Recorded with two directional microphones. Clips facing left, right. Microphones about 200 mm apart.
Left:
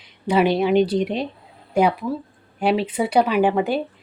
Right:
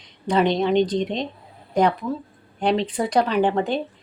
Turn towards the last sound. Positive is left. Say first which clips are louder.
# left 2 dB
turn(degrees=10)  # may be behind; listen again after turning